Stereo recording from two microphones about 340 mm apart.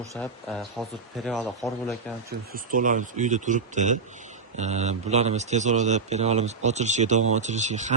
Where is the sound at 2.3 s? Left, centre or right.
Right.